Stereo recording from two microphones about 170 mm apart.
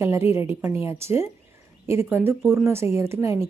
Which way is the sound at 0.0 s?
15° right (ahead or behind).